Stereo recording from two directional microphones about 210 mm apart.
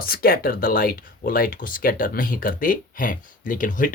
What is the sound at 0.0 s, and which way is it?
Speech, 45° left (ahead or behind).